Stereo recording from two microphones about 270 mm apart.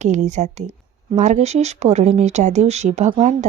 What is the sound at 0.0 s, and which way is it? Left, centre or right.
Speech, right.